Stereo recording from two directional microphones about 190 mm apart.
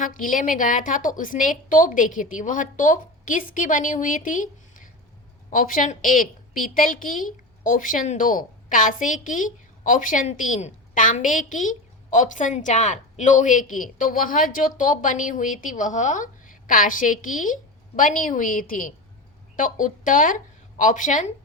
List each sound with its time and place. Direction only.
0.0 s a woman's voice: 45° left (ahead or behind)